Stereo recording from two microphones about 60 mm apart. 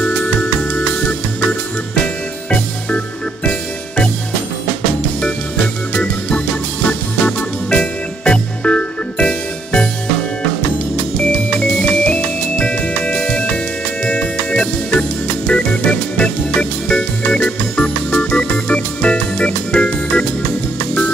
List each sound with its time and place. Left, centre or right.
3.4 s music: centre
6.9 s music: centre
12.0 s music: centre